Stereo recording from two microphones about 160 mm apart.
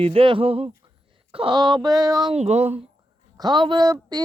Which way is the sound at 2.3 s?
45° right (ahead or behind).